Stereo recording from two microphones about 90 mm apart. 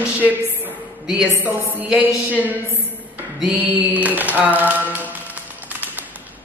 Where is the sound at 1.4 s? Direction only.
20° right (ahead or behind).